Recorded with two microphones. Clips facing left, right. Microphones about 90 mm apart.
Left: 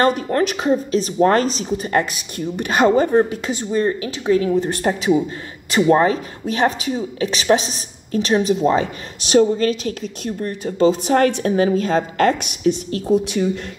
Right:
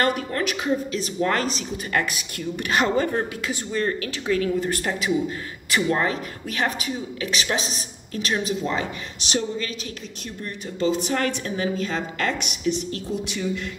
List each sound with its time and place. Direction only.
0.0 s a woman's voice: 30° left (ahead or behind)